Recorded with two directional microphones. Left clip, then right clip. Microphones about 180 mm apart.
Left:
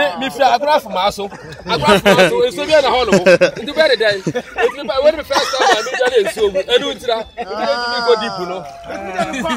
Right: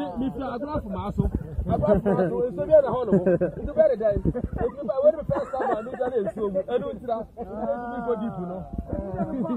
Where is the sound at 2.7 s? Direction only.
55° left (ahead or behind).